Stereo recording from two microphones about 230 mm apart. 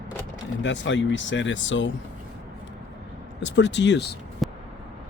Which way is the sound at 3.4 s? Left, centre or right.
Left.